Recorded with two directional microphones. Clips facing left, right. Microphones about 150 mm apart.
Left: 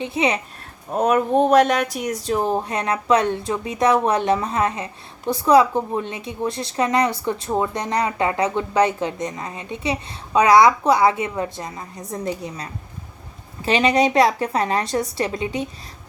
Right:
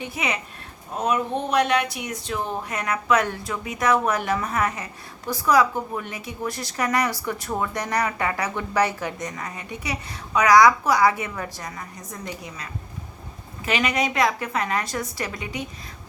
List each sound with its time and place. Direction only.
0.0 s speech: 25° left (ahead or behind)
0.9 s a woman's voice: 50° left (ahead or behind); by 15.6 s 30° left (ahead or behind)